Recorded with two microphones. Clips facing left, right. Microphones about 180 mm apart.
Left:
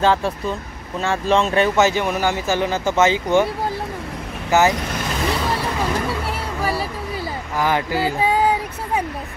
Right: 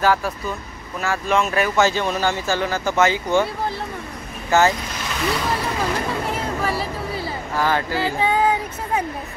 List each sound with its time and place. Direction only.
0.0 s speech: 25° left (ahead or behind)
4.5 s speech: 15° left (ahead or behind)
7.5 s speech: 15° left (ahead or behind)